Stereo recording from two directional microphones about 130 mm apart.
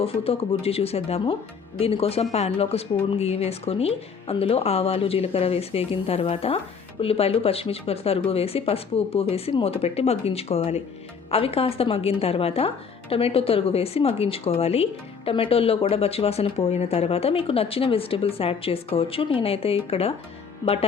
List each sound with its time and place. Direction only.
0.0 s speech: 50° left (ahead or behind)